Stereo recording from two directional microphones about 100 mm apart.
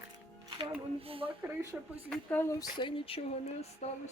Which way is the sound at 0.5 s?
70° right (ahead or behind).